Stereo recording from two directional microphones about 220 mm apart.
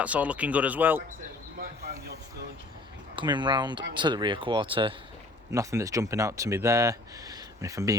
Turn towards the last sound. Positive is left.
turn(degrees=-15)  # may be behind; listen again after turning